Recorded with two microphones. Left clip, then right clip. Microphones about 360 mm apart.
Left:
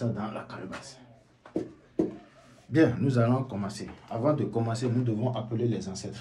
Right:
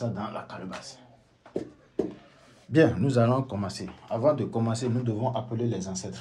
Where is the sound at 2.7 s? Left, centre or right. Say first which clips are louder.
Right 2 dB; right.